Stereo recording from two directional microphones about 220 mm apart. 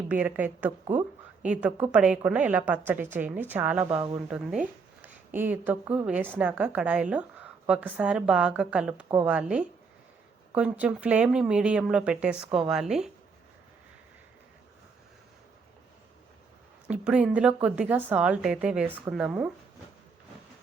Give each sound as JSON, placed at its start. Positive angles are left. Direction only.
{"t": 0.1, "sound": "a woman's voice", "side_deg": -5}
{"t": 0.9, "sound": "speech", "side_deg": -35}
{"t": 1.4, "sound": "a woman's voice", "side_deg": -5}
{"t": 16.9, "sound": "a woman's voice", "side_deg": -5}